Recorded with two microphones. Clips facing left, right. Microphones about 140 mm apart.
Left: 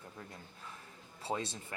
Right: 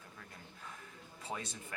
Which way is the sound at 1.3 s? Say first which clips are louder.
Left 6 dB; 30° left (ahead or behind).